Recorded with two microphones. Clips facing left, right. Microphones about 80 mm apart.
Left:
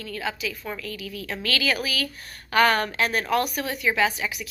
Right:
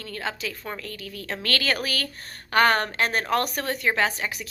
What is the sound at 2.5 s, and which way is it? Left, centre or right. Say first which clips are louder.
A woman's voice: even; right.